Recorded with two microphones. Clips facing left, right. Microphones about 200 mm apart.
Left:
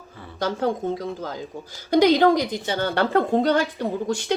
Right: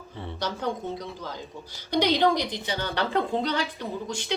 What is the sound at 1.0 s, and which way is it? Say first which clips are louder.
A woman's voice: left 7 dB; 45° left (ahead or behind).